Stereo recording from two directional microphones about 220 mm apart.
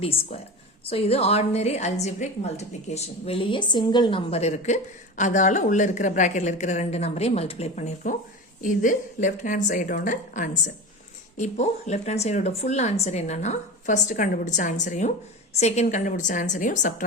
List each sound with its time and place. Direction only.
0.0 s a woman's voice: 25° left (ahead or behind)